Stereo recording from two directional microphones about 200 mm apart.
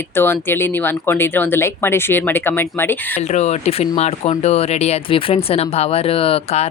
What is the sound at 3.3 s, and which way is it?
Speech, 35° left (ahead or behind).